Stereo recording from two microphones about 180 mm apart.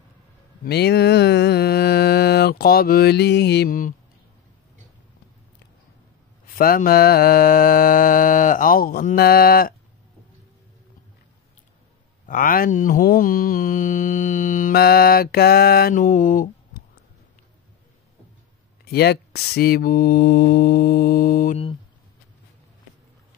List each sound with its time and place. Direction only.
0.7 s mantra: 65° left (ahead or behind)
6.4 s mantra: 55° left (ahead or behind)
12.3 s mantra: 50° left (ahead or behind)
18.9 s mantra: 60° left (ahead or behind)